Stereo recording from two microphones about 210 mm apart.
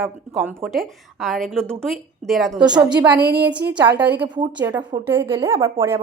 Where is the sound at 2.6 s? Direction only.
20° right (ahead or behind).